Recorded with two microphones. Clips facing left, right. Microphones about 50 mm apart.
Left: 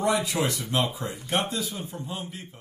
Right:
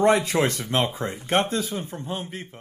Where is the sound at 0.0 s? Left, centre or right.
Right.